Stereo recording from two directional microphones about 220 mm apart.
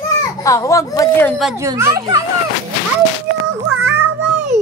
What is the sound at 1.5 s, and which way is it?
Speech, 15° right (ahead or behind).